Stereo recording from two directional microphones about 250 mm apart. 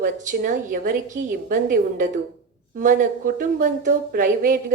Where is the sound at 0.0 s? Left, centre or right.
Right.